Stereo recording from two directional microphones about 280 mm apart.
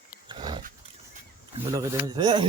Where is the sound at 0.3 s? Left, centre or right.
Centre.